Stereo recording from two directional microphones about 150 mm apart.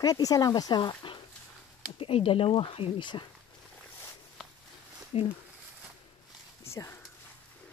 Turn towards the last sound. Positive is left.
turn(degrees=20)  # may be behind; listen again after turning